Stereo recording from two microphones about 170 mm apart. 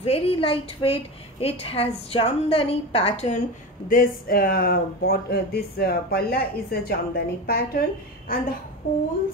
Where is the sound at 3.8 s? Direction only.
55° left (ahead or behind).